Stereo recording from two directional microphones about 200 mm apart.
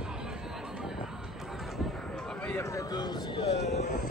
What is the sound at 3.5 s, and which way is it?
Vehicle, 60° left (ahead or behind).